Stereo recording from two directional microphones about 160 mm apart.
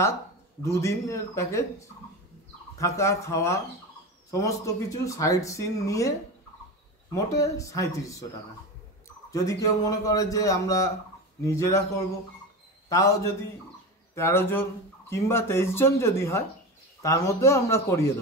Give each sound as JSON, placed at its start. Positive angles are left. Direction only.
{"t": 0.7, "sound": "speech", "side_deg": 20}
{"t": 9.3, "sound": "speech", "side_deg": 20}
{"t": 12.9, "sound": "speech", "side_deg": 20}